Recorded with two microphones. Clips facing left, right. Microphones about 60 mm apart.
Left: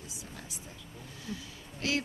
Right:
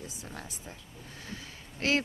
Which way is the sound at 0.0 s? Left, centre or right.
Right.